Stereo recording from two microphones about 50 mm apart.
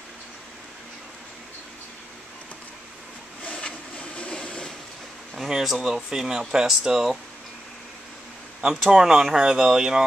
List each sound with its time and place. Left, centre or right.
3.4 s a sound: left
5.4 s speech: centre
8.9 s speech: centre